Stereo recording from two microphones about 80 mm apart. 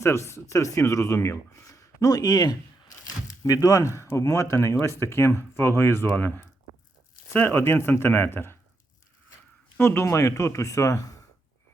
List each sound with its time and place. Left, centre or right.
0.0 s speech: left
9.7 s speech: left